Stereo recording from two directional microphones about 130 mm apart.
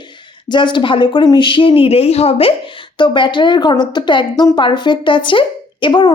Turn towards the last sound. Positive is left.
turn(degrees=35)  # may be behind; listen again after turning